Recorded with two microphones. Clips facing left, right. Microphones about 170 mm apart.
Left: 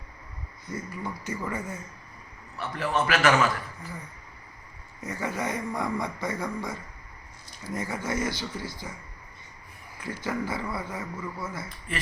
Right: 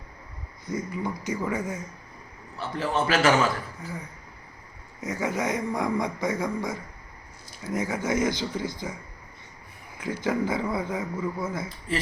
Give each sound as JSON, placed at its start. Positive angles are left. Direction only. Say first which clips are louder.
{"t": 0.7, "sound": "a man's voice", "louder": "right 5 dB", "side_deg": -15}
{"t": 2.6, "sound": "a man's voice", "louder": "right 1 dB", "side_deg": -30}
{"t": 4.9, "sound": "a man's voice", "louder": "right 3 dB", "side_deg": -15}
{"t": 10.0, "sound": "a man's voice", "louder": "right 5 dB", "side_deg": -15}